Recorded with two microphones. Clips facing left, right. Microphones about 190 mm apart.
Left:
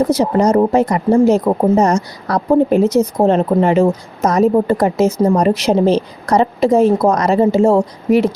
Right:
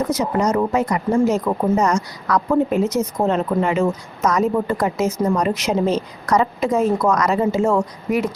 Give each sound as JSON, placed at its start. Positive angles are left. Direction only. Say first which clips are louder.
{"t": 0.0, "sound": "a woman's voice", "louder": "left 6 dB", "side_deg": 30}